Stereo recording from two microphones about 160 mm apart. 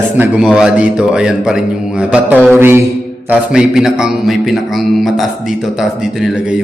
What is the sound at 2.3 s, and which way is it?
Speech, 5° left (ahead or behind).